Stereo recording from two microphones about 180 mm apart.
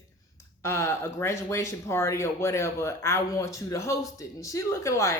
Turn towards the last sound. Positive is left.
turn(degrees=15)  # may be behind; listen again after turning